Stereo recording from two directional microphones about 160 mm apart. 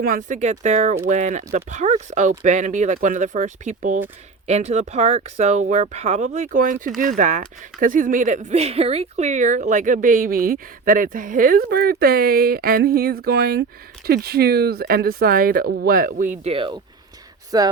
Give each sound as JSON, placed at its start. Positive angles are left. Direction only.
{"t": 0.0, "sound": "speech", "side_deg": -60}
{"t": 16.5, "sound": "speech", "side_deg": -30}